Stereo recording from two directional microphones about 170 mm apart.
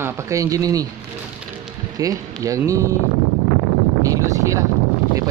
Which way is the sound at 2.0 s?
20° right (ahead or behind).